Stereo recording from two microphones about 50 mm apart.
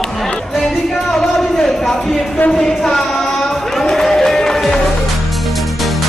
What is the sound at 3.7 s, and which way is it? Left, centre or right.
Music, centre.